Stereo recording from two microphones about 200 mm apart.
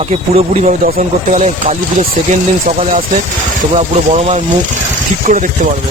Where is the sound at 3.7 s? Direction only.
35° right (ahead or behind).